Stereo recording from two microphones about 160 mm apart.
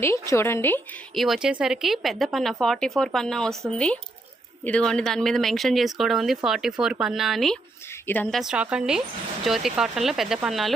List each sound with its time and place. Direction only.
0.0 s a woman's voice: 15° left (ahead or behind)
1.1 s speech: centre (ahead or behind)
4.6 s speech: 5° left (ahead or behind)
8.0 s a woman's voice: 10° left (ahead or behind)
8.3 s speech: centre (ahead or behind)